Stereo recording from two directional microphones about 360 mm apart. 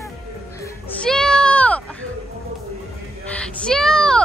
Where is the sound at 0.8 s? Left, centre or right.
Centre.